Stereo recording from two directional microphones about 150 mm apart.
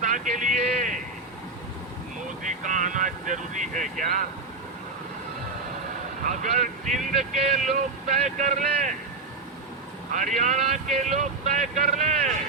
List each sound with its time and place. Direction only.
0.0 s speech: 55° right (ahead or behind)
2.4 s speech: 60° right (ahead or behind)
6.2 s speech: 55° right (ahead or behind)
10.1 s speech: 55° right (ahead or behind)